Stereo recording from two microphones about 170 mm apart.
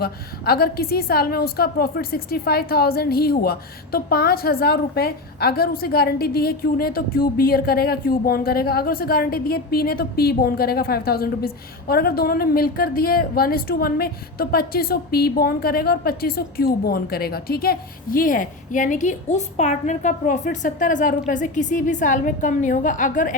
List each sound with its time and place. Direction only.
0.0 s a woman's voice: 65° left (ahead or behind)